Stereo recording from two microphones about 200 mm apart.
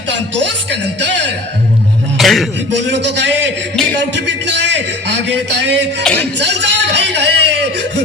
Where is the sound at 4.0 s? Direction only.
60° right (ahead or behind).